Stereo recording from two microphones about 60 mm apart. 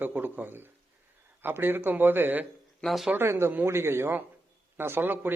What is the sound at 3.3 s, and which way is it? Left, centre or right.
A man's voice, right.